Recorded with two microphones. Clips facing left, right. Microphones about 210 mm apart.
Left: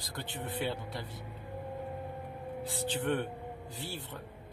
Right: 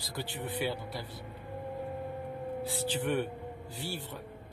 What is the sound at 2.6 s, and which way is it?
Speech, 20° left (ahead or behind).